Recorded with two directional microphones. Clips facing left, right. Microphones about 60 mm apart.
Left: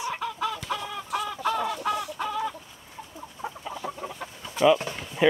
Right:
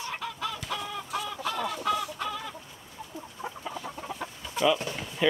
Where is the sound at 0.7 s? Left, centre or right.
Left.